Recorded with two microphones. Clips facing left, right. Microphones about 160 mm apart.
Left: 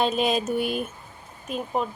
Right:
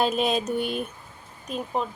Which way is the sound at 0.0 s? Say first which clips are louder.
Even; centre (ahead or behind).